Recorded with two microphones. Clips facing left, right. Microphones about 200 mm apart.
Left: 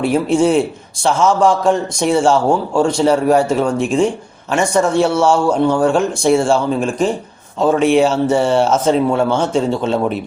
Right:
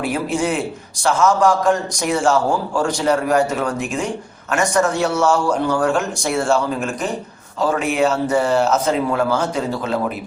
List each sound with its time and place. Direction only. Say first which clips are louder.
0.3 s a man's voice: left 7 dB; 30° left (ahead or behind)